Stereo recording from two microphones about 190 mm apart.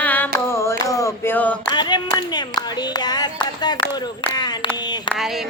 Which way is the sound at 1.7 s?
25° left (ahead or behind).